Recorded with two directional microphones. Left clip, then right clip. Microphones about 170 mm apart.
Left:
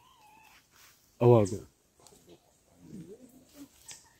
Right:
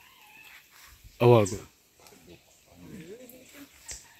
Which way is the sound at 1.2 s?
10° left (ahead or behind).